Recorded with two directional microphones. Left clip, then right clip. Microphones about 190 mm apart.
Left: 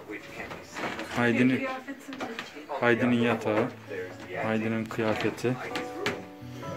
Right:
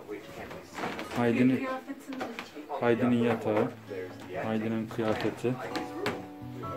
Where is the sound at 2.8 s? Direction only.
5° right (ahead or behind).